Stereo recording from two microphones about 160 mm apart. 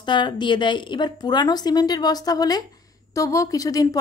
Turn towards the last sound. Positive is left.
turn(degrees=20)  # may be behind; listen again after turning